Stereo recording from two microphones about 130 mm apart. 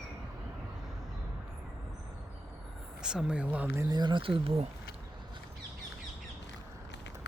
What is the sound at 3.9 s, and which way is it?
Speech, 35° right (ahead or behind).